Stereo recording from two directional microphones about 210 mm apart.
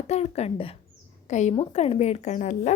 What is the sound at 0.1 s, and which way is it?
A woman's voice, 30° left (ahead or behind).